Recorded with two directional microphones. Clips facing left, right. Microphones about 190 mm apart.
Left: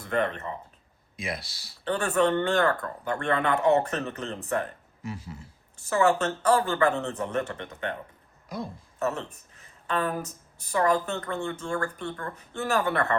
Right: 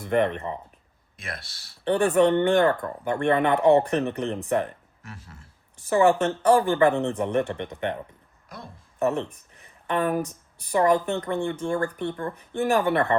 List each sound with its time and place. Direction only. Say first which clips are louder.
0.0 s speech: right 4 dB; 15° right (ahead or behind)
1.1 s speech: left 5 dB; centre (ahead or behind)
1.8 s speech: right 5 dB; 15° right (ahead or behind)
5.0 s speech: left 8 dB; centre (ahead or behind)
5.9 s speech: right 4 dB; 15° right (ahead or behind)
8.4 s speech: left 7 dB; centre (ahead or behind)
9.0 s speech: right 5 dB; 15° right (ahead or behind)